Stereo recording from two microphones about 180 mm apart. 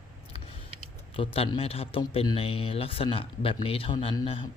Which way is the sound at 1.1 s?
30° left (ahead or behind).